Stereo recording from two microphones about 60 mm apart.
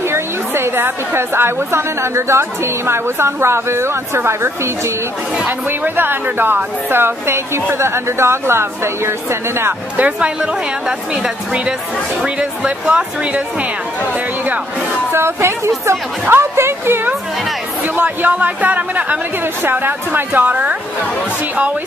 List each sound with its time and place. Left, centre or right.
0.1 s a woman's voice: right
5.7 s a woman's voice: right
9.9 s speech: right
10.4 s a woman's voice: centre
15.1 s a woman's voice: right
17.9 s a woman's voice: right